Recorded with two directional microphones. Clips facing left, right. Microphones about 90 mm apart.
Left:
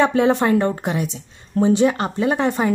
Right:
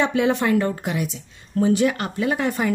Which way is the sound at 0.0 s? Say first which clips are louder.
Left 4 dB; 35° left (ahead or behind).